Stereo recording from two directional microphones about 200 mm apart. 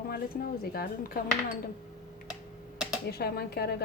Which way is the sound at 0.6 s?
50° left (ahead or behind).